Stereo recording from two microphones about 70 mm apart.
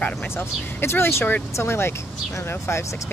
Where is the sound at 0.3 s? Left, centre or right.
Left.